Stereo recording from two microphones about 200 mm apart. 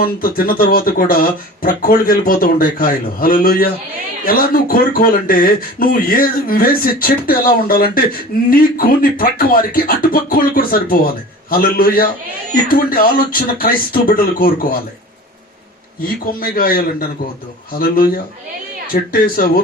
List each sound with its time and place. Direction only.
0.0 s speech: 45° left (ahead or behind)
16.0 s speech: 45° left (ahead or behind)